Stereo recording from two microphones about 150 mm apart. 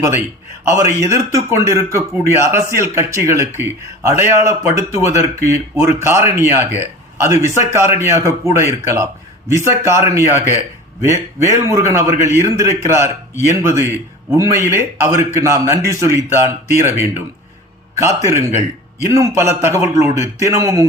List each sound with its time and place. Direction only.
0.6 s a man's voice: 20° right (ahead or behind)